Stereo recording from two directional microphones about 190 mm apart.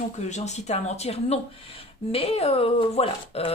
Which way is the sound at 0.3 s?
35° left (ahead or behind).